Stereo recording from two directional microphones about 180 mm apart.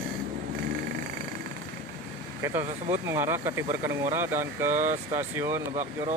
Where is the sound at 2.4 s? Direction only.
15° right (ahead or behind).